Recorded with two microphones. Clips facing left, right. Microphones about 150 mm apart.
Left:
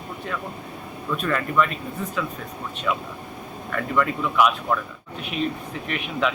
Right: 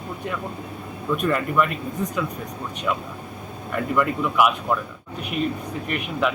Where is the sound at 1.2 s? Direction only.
10° right (ahead or behind).